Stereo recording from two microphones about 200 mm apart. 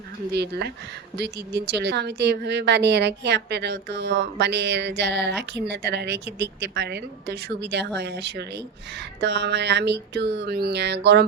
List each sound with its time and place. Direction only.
1.1 s speech: 55° right (ahead or behind)